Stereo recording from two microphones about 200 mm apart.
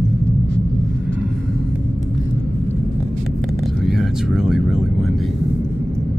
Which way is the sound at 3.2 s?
Centre (ahead or behind).